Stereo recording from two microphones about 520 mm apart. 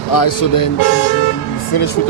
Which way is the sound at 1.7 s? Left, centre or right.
Left.